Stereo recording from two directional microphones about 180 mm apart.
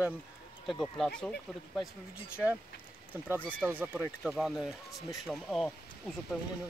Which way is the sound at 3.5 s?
10° right (ahead or behind).